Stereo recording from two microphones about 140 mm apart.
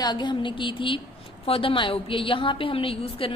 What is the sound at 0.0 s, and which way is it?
A woman's voice, 30° left (ahead or behind).